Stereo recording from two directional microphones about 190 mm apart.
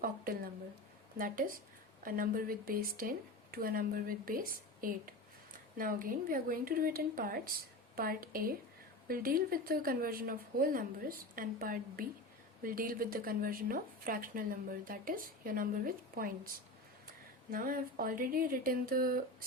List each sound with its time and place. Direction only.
1.2 s speech: 45° right (ahead or behind)
17.5 s speech: 50° right (ahead or behind)